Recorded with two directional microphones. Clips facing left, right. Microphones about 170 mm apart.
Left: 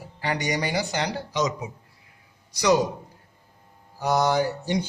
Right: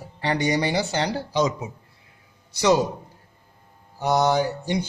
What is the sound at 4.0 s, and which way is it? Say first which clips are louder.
Speech: right 2 dB; 20° right (ahead or behind).